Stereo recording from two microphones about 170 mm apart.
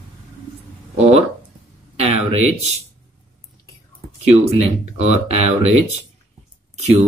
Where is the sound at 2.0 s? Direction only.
40° right (ahead or behind).